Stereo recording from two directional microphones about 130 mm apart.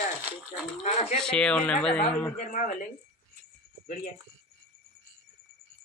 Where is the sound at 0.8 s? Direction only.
60° left (ahead or behind).